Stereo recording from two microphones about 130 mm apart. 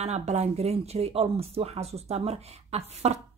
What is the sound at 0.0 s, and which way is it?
Speech, 55° right (ahead or behind).